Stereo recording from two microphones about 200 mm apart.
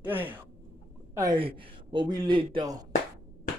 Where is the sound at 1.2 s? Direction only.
25° right (ahead or behind).